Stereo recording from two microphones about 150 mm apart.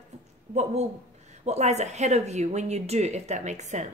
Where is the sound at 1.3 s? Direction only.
50° right (ahead or behind).